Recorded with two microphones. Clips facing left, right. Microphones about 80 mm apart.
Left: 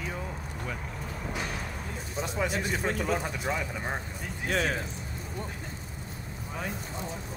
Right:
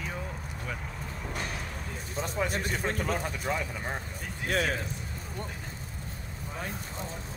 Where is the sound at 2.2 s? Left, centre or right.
Right.